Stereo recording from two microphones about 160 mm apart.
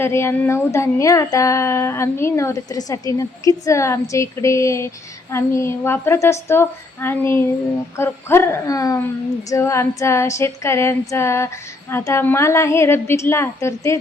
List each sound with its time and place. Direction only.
0.0 s a woman's voice: 15° left (ahead or behind)